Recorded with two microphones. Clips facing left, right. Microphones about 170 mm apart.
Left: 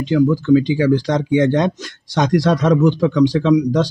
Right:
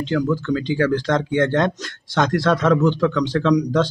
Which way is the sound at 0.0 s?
10° left (ahead or behind).